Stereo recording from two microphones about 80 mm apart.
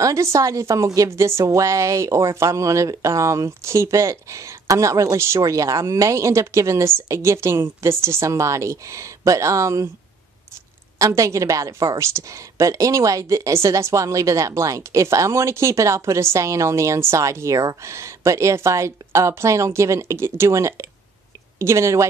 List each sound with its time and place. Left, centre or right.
0.0 s a woman's voice: right
11.0 s a woman's voice: right